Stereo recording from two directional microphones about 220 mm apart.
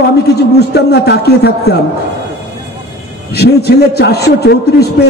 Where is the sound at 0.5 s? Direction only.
45° left (ahead or behind).